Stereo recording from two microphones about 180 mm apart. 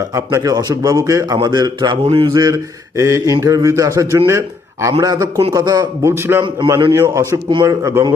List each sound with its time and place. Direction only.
0.1 s a man's voice: 15° right (ahead or behind)
6.4 s a man's voice: 25° right (ahead or behind)